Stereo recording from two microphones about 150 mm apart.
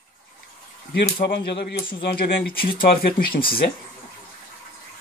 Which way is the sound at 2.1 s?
85° left.